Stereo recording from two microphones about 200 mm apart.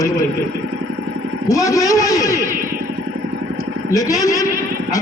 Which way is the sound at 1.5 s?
15° left (ahead or behind).